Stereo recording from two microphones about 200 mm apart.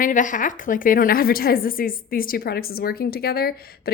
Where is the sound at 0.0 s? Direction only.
40° left (ahead or behind).